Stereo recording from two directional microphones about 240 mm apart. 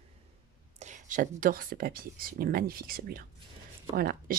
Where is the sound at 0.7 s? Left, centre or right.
Right.